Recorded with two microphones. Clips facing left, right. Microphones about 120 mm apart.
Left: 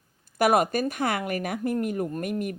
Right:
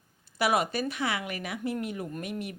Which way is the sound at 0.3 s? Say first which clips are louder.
Left 5 dB; 50° left (ahead or behind).